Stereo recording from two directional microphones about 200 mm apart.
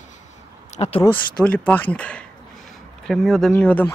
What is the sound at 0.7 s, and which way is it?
Speech, 35° left (ahead or behind).